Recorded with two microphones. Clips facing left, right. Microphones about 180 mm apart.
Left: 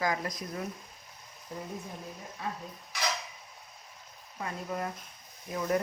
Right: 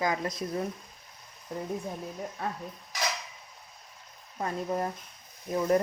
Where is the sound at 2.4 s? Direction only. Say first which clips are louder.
Right 2 dB; 50° right (ahead or behind).